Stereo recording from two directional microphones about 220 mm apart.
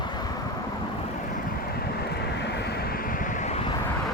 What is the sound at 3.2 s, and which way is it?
Vehicle, 35° left (ahead or behind).